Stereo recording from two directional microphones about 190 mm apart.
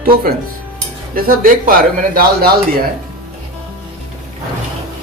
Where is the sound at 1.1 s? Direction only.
50° right (ahead or behind).